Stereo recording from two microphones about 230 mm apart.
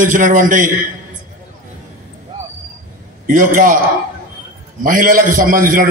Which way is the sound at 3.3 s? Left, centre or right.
Right.